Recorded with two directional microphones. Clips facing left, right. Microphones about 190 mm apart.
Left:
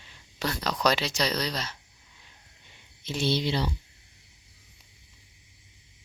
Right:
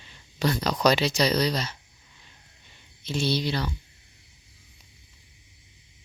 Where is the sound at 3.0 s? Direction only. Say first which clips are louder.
Right 1 dB; 20° left (ahead or behind).